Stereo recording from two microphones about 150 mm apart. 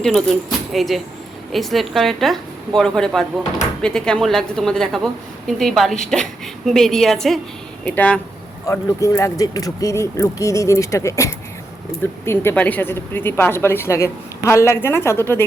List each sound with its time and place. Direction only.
0.7 s a woman's voice: centre (ahead or behind)
8.6 s speech: 20° left (ahead or behind)